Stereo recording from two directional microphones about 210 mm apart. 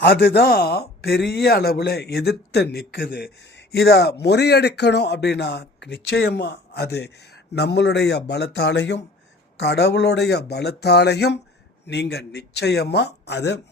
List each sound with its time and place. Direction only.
0.0 s speech: 50° left (ahead or behind)